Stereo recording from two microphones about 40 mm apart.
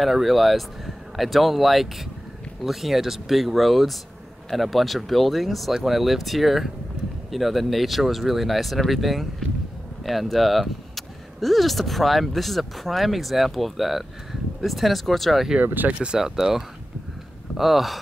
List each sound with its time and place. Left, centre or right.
0.0 s speech: centre
15.6 s speech: right
15.9 s speech: right
16.2 s speech: centre